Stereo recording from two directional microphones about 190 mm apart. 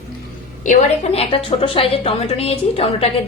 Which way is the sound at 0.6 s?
35° left (ahead or behind).